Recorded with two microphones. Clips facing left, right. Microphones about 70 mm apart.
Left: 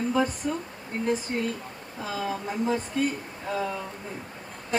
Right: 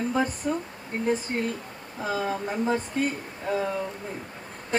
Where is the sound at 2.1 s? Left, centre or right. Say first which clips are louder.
Right 3 dB; right.